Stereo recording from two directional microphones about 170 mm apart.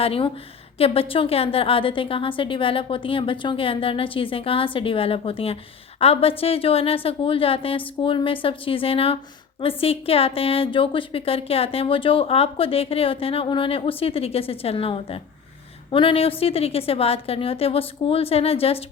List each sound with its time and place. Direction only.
0.0 s a woman's voice: 35° left (ahead or behind)